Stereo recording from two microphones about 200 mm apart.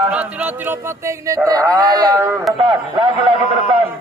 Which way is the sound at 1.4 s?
15° right (ahead or behind).